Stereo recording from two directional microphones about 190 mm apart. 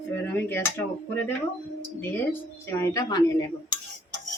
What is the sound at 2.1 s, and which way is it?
Speech, 10° left (ahead or behind).